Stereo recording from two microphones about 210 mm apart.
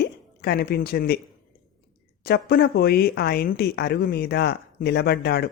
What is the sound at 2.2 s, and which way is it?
Speech, 50° left (ahead or behind).